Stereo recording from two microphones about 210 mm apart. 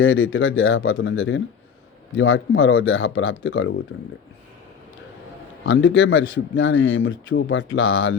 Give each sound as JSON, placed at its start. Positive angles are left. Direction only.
{"t": 0.0, "sound": "speech", "side_deg": 70}
{"t": 5.6, "sound": "a man's voice", "side_deg": 65}